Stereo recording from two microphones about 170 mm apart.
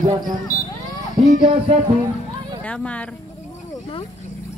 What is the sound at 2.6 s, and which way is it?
Speech, 5° left (ahead or behind).